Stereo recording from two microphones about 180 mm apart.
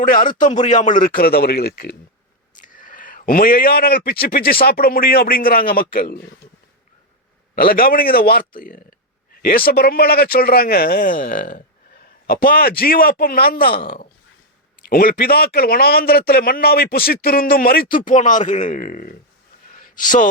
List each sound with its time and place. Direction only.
0.0 s a man's voice: 50° left (ahead or behind)
2.6 s speech: 45° left (ahead or behind)
7.5 s speech: 55° left (ahead or behind)
19.7 s a sound: 50° left (ahead or behind)